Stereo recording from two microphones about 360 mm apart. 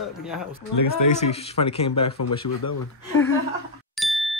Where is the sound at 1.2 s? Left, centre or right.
Centre.